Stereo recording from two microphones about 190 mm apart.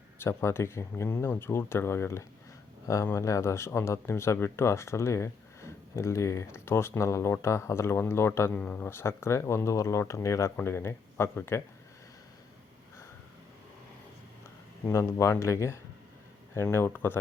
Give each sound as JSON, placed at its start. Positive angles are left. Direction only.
{"t": 0.2, "sound": "speech", "side_deg": 15}
{"t": 14.8, "sound": "speech", "side_deg": 15}